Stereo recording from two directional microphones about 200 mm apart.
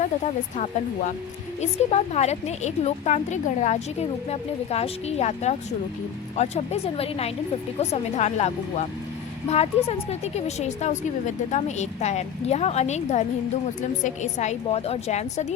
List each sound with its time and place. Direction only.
0.5 s a woman's voice: 35° left (ahead or behind)